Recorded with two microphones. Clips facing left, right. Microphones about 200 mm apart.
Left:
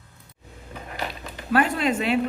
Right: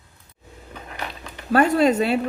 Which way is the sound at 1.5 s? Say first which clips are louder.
Right 5 dB; 40° right (ahead or behind).